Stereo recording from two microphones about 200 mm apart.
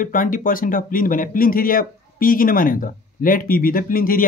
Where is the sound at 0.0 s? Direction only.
45° left (ahead or behind).